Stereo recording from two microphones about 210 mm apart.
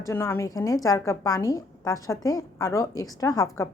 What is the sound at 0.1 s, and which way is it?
A woman's voice, 10° left (ahead or behind).